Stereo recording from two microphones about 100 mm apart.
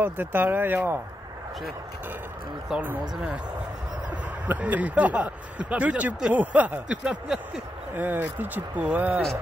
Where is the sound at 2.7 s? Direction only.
5° right (ahead or behind).